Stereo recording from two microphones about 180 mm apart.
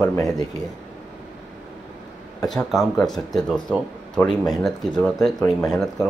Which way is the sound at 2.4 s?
Centre (ahead or behind).